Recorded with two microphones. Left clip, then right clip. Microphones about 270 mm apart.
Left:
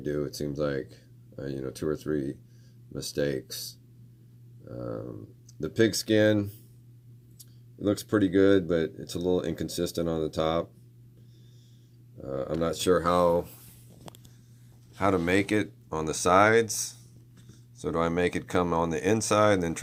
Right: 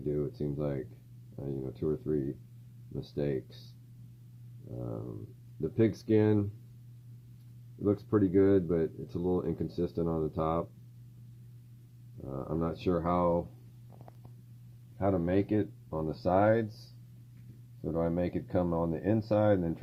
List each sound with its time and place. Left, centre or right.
0.1 s speech: centre
5.5 s speech: centre
7.9 s speech: centre
12.3 s speech: centre
14.9 s speech: centre
15.9 s speech: left
16.3 s speech: centre
17.9 s speech: centre